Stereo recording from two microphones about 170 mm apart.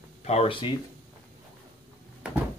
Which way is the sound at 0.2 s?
35° left (ahead or behind).